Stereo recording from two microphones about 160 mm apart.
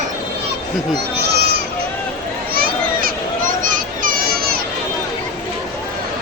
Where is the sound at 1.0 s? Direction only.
90° right.